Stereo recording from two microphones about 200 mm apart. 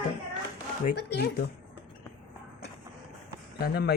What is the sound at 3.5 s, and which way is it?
Speech, 50° left (ahead or behind).